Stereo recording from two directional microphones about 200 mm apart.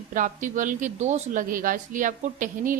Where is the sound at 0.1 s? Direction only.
40° right (ahead or behind).